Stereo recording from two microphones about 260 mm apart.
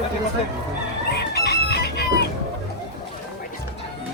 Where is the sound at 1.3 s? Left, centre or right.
Left.